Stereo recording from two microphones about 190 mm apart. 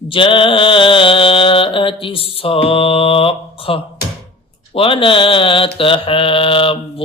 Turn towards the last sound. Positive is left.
turn(degrees=30)  # may be behind; listen again after turning